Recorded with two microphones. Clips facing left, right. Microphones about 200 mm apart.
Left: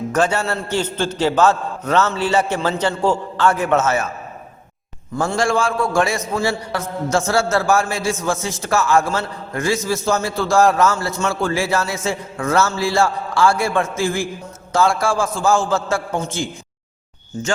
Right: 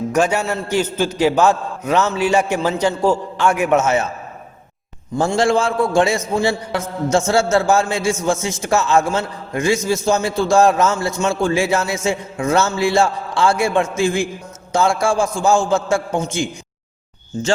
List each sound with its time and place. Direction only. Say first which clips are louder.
0.1 s a man's voice: right 1 dB; 10° right (ahead or behind)
5.3 s a man's voice: right 2 dB; 20° right (ahead or behind)